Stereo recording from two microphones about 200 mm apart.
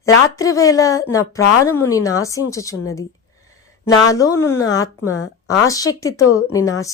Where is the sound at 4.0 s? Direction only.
15° left (ahead or behind).